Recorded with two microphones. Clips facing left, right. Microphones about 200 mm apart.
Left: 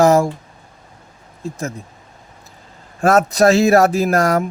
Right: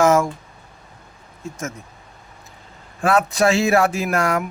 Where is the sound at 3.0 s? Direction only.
40° left (ahead or behind).